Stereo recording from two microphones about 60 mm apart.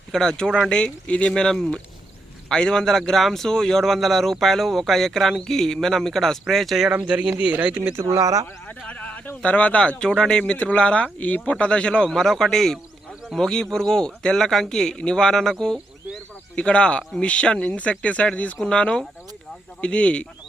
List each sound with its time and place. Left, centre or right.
0.1 s speech: centre
1.3 s speech: centre
6.9 s speech: right
8.0 s speech: right
8.6 s speech: left
11.5 s speech: centre